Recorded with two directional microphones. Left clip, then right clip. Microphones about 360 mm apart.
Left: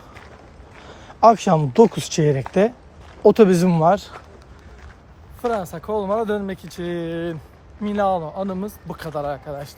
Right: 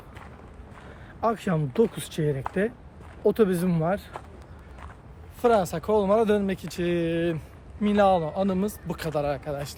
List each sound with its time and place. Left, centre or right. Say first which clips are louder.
1.2 s speech: left 13 dB; centre
5.4 s speech: right 2 dB; centre